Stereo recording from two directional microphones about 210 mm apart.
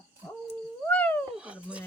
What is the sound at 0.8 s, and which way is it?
Cat, 10° left (ahead or behind).